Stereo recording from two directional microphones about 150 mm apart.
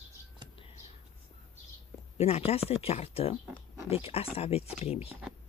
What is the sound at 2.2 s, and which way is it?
Speech, 45° left (ahead or behind).